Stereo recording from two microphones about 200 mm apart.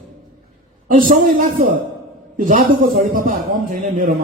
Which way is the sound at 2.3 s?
45° right (ahead or behind).